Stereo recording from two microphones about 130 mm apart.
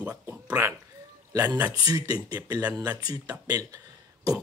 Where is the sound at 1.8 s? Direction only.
30° right (ahead or behind).